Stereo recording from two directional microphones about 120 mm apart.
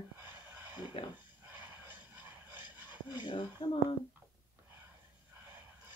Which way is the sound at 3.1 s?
40° left (ahead or behind).